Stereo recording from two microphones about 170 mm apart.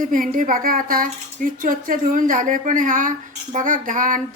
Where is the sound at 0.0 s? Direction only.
55° right (ahead or behind).